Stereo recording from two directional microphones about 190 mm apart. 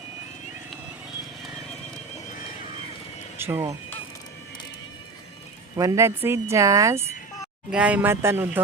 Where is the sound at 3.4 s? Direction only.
10° right (ahead or behind).